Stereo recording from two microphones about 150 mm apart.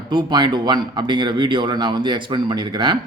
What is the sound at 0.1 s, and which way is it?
Speech, 30° right (ahead or behind).